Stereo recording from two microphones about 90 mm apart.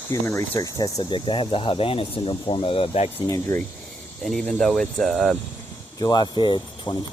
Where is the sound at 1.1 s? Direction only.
70° left (ahead or behind); by 2.9 s 90° left.